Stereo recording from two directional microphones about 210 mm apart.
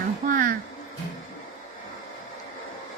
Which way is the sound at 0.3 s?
40° right (ahead or behind).